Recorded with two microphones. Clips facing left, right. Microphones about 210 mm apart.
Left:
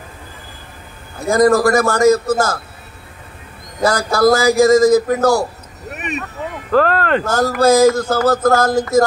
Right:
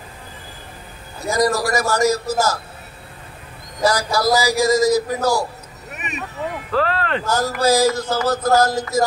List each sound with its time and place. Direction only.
1.2 s speech: 55° left (ahead or behind)
3.8 s speech: 50° left (ahead or behind)
6.7 s speech: 45° left (ahead or behind)